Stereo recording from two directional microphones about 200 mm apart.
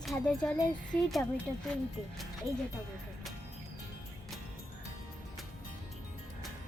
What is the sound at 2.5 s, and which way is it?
Speech, 15° right (ahead or behind).